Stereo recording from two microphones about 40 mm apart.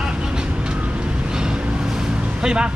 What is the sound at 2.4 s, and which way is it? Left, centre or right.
Speech, right.